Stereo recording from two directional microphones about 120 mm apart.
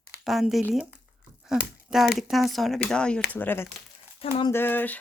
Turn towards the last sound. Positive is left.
turn(degrees=15)  # may be behind; listen again after turning